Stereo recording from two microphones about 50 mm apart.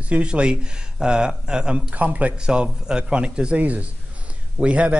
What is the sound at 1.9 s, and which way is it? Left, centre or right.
Speech, right.